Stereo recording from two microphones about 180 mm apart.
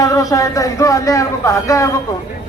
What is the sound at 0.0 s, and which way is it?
A man's voice, 20° left (ahead or behind).